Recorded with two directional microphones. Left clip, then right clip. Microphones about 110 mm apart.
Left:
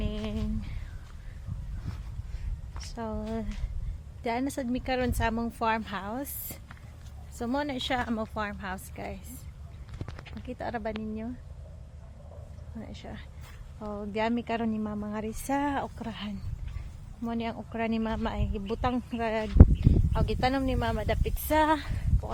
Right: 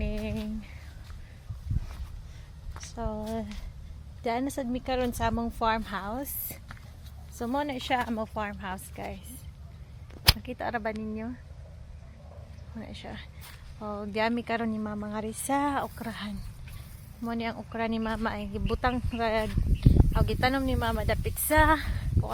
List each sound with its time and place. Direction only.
0.0 s humming: centre (ahead or behind)
2.9 s a woman's voice: 20° left (ahead or behind)
3.2 s a woman's voice: 5° left (ahead or behind)
6.1 s speech: 10° left (ahead or behind)
7.3 s speech: centre (ahead or behind)
10.4 s speech: 15° right (ahead or behind)
12.7 s speech: 5° right (ahead or behind)
14.1 s speech: 15° left (ahead or behind)
17.7 s speech: 15° left (ahead or behind)